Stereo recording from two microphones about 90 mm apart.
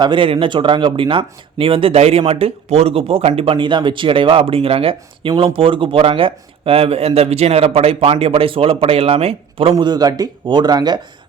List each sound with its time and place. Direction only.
0.0 s speech: 65° right (ahead or behind); by 5.3 s 90° right
5.5 s speech: 75° right (ahead or behind)
9.7 s speech: 50° right (ahead or behind)
10.4 s speech: 55° right (ahead or behind)